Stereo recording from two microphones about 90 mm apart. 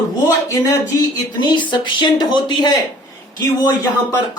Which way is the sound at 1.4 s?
60° left (ahead or behind).